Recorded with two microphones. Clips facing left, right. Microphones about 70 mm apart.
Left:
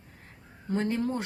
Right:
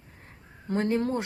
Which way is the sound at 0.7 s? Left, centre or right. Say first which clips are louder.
Right 2 dB; right.